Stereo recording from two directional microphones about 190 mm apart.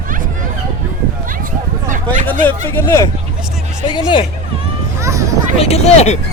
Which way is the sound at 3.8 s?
25° left (ahead or behind).